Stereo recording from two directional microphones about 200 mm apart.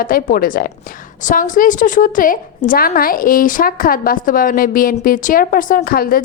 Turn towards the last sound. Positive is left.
turn(degrees=45)  # may be behind; listen again after turning